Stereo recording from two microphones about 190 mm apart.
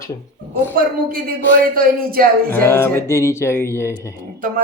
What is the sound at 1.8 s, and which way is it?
Music, 50° right (ahead or behind).